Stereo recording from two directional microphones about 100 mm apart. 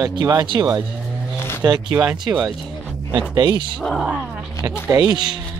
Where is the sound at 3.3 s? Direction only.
45° right (ahead or behind).